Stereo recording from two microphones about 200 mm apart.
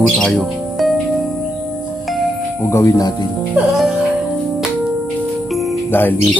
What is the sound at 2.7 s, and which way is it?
Speech, 15° left (ahead or behind).